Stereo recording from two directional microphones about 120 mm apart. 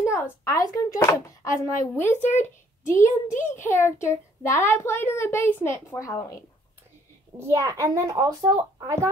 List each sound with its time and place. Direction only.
0.0 s speech: 25° left (ahead or behind)
7.3 s speech: 25° right (ahead or behind)